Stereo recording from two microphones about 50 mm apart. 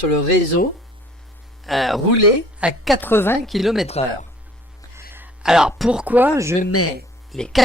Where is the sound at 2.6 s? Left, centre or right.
Right.